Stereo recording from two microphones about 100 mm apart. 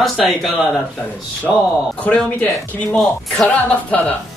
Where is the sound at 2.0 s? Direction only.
15° left (ahead or behind).